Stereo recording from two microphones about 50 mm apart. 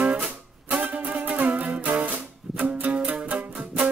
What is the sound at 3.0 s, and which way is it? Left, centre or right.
Music, right.